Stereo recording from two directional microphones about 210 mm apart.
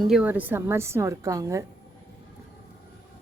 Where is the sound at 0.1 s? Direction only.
5° right (ahead or behind).